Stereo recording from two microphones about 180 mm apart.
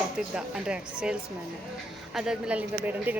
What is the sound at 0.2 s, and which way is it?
Speech, 5° right (ahead or behind).